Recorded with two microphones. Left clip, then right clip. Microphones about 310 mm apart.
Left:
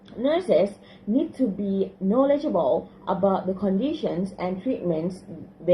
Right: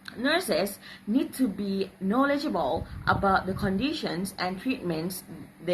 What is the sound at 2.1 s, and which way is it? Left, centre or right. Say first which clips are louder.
Speech: left 5 dB; right.